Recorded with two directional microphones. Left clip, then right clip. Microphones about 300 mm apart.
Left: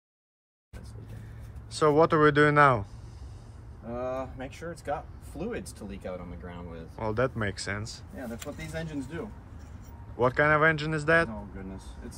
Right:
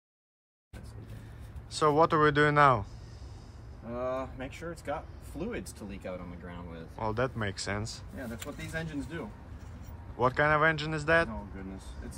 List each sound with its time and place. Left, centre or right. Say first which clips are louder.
1.7 s speech: left 2 dB; centre